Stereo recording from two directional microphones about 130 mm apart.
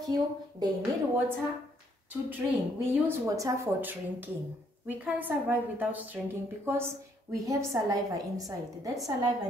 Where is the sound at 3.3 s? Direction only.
25° right (ahead or behind).